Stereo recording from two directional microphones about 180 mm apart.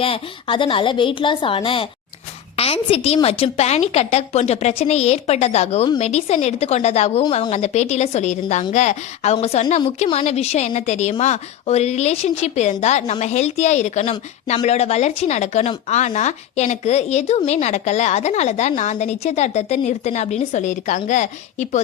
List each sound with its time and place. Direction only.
0.0 s a woman's voice: 30° left (ahead or behind)